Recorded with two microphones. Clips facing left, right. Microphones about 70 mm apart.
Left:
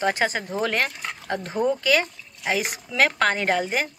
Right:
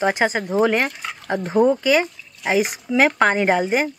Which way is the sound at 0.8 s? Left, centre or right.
Centre.